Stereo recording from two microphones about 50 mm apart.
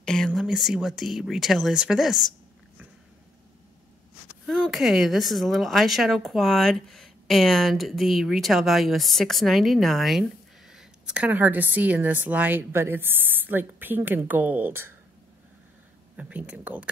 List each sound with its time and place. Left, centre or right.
0.0 s a sound: centre
0.4 s a woman's voice: centre
1.7 s a woman's voice: centre
4.6 s a woman's voice: centre
10.7 s a sound: centre
11.1 s a woman's voice: right
12.7 s a woman's voice: right
16.2 s a woman's voice: right